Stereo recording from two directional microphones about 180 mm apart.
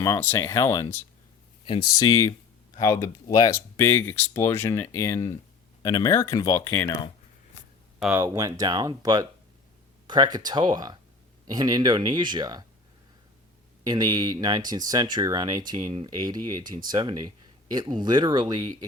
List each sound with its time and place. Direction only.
0.0 s speech: 15° left (ahead or behind)
1.6 s speech: 25° left (ahead or behind)
7.9 s speech: 5° right (ahead or behind)
8.2 s speech: 15° right (ahead or behind)
13.8 s speech: 20° right (ahead or behind)